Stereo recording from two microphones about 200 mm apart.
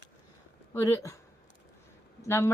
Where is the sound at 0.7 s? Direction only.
15° left (ahead or behind).